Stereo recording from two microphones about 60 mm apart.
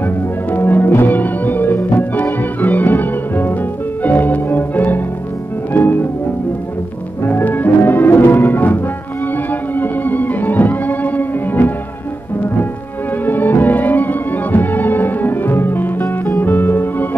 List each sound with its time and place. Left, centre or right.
0.0 s music: left
7.2 s music: left
13.2 s music: left